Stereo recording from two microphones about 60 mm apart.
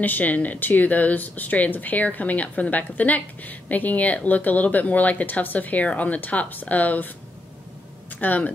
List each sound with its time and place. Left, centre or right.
0.0 s speech: left
8.2 s speech: left